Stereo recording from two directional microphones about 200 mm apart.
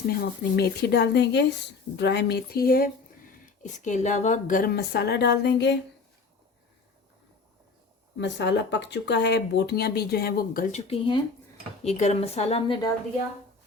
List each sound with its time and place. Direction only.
0.2 s a woman's voice: 55° left (ahead or behind)
8.2 s speech: 60° left (ahead or behind)
10.8 s a woman's voice: 25° left (ahead or behind)